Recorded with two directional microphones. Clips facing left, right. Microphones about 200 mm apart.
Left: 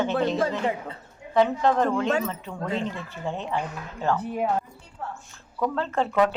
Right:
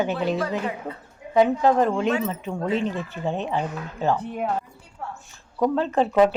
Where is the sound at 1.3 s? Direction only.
10° right (ahead or behind).